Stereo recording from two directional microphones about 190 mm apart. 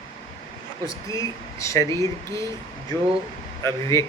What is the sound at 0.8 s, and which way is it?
Speech, 15° left (ahead or behind).